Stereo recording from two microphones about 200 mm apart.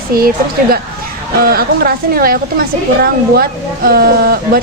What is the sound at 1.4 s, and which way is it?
A woman's voice, 50° right (ahead or behind).